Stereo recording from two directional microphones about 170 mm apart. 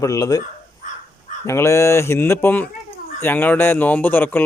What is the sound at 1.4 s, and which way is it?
Speech, 15° left (ahead or behind).